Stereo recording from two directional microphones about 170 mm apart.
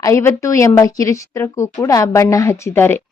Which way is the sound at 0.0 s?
15° left (ahead or behind).